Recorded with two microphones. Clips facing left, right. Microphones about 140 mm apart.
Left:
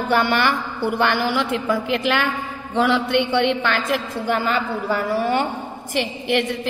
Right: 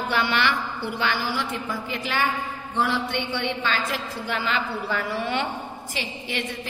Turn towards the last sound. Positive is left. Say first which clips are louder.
# left 10 dB
turn(degrees=60)  # may be behind; listen again after turning